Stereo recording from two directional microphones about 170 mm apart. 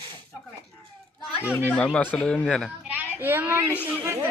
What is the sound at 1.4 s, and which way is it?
Speech, 10° left (ahead or behind).